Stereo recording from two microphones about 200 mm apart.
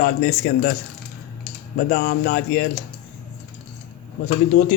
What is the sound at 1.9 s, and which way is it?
Speech, 45° left (ahead or behind).